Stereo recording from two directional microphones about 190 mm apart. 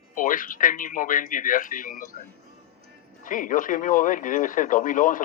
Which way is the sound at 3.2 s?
45° left (ahead or behind).